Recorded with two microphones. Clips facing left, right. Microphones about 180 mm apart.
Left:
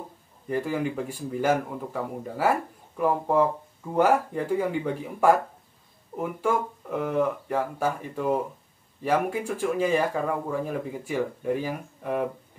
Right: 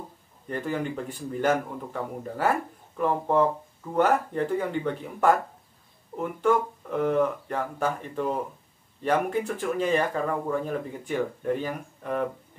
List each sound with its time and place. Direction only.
0.5 s speech: 10° left (ahead or behind)